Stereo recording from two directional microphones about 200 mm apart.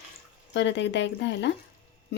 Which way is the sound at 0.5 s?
60° left (ahead or behind).